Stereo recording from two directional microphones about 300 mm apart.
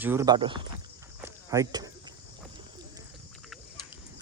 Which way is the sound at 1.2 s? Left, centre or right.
Centre.